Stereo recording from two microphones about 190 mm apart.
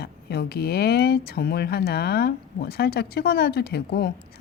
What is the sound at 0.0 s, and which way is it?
Speech, 60° left (ahead or behind).